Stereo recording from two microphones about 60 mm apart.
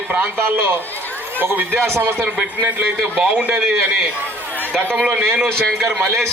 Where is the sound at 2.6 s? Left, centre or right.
Right.